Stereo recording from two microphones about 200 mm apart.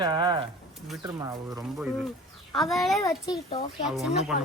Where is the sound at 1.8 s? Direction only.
5° right (ahead or behind).